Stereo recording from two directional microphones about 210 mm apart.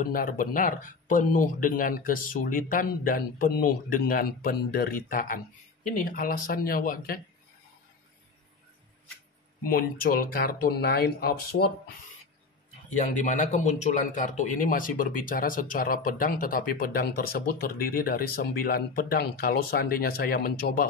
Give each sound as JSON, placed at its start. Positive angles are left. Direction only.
{"t": 0.0, "sound": "speech", "side_deg": 40}
{"t": 9.6, "sound": "speech", "side_deg": 45}
{"t": 13.0, "sound": "speech", "side_deg": 35}